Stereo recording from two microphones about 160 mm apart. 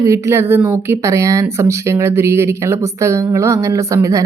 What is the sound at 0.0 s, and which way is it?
Speech, 15° right (ahead or behind).